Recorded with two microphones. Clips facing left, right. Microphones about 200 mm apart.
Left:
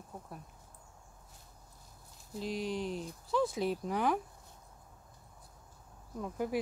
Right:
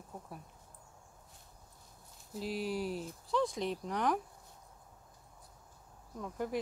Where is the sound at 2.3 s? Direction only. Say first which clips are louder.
Even; 5° right (ahead or behind).